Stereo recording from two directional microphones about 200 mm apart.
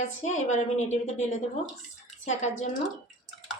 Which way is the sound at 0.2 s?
35° left (ahead or behind).